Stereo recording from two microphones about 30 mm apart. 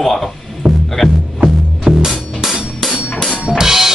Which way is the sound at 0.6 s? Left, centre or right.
Right.